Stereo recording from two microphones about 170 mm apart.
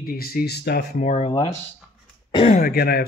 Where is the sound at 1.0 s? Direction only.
40° left (ahead or behind).